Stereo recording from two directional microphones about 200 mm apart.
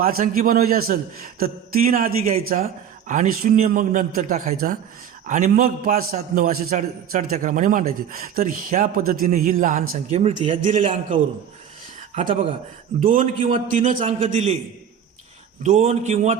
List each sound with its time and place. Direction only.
0.0 s a man's voice: 45° right (ahead or behind); by 10.6 s 30° right (ahead or behind)
10.8 s a man's voice: 40° right (ahead or behind)
13.0 s a man's voice: 40° right (ahead or behind)
15.6 s a man's voice: 35° right (ahead or behind)